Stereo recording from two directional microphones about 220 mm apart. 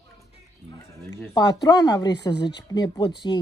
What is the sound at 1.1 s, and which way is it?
Speech, 15° left (ahead or behind).